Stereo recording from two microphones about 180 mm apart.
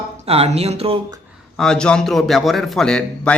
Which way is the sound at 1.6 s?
5° left (ahead or behind).